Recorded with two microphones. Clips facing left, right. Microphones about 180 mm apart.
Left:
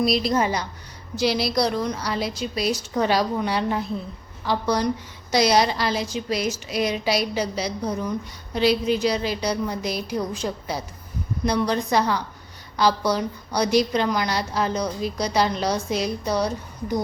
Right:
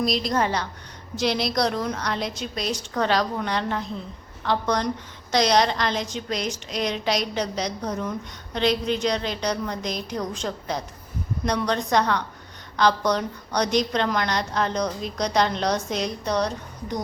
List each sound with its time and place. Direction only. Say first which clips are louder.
0.2 s a woman's voice: left 2 dB; 10° left (ahead or behind)